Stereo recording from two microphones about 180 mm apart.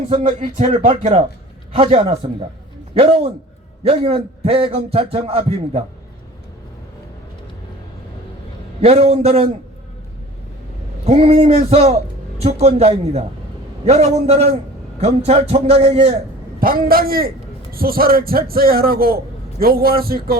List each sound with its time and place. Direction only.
0.1 s a man's voice: 45° right (ahead or behind)
8.8 s a man's voice: 35° right (ahead or behind)
11.0 s a man's voice: 35° right (ahead or behind)
16.6 s a man's voice: 55° right (ahead or behind)